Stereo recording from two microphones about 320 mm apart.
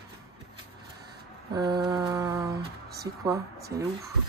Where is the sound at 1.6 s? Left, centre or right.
Centre.